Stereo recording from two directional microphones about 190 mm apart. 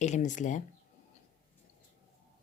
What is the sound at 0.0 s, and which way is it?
Speech, 40° left (ahead or behind).